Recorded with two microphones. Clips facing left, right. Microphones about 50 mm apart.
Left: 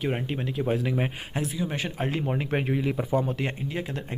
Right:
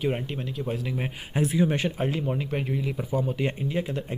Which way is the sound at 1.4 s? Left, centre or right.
Right.